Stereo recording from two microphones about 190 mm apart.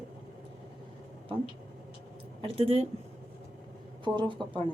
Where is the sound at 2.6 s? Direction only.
30° right (ahead or behind).